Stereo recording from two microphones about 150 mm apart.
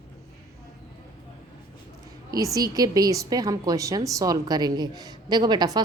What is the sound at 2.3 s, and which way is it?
A woman's voice, 25° right (ahead or behind).